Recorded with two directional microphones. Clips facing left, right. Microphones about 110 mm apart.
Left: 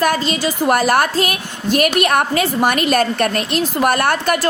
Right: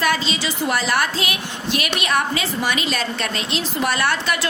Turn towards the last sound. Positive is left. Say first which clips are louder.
# left 5 dB
turn(degrees=50)  # may be behind; listen again after turning